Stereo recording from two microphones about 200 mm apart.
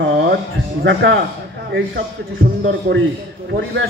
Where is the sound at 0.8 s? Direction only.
65° right (ahead or behind).